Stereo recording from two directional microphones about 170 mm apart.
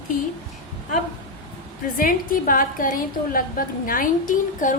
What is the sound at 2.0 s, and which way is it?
A woman's voice, 55° left (ahead or behind).